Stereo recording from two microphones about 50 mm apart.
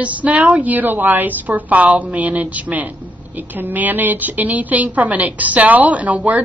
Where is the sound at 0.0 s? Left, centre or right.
Right.